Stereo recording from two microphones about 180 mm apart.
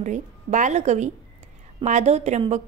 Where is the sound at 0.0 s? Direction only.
40° right (ahead or behind).